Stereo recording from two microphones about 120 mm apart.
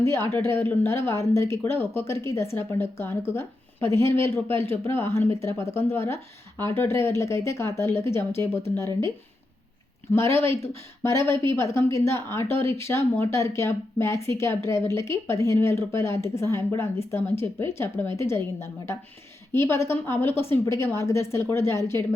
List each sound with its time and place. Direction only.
0.0 s speech: 20° left (ahead or behind)
10.2 s speech: 20° left (ahead or behind)